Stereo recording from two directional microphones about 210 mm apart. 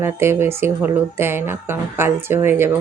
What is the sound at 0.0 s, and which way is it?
Speech, 10° right (ahead or behind).